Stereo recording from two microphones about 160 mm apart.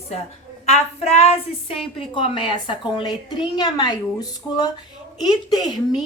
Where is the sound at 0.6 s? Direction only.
45° left (ahead or behind).